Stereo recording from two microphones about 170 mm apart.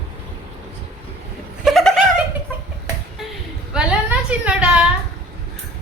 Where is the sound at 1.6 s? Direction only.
Centre (ahead or behind).